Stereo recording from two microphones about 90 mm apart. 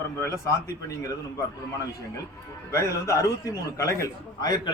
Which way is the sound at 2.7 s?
35° left (ahead or behind).